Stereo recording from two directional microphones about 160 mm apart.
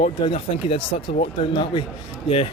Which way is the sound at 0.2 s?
35° left (ahead or behind).